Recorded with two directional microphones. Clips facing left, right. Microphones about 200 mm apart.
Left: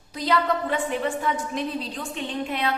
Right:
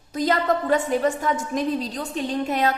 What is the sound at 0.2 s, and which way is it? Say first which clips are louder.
A woman's voice: right 2 dB; 45° right (ahead or behind).